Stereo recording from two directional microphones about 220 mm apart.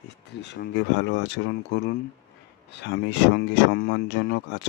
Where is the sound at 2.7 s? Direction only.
50° left (ahead or behind).